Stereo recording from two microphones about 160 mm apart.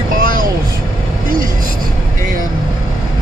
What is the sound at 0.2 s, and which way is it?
Vehicle, 60° right (ahead or behind).